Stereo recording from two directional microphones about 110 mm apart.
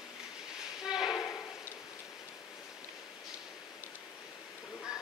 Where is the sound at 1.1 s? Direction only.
30° left (ahead or behind).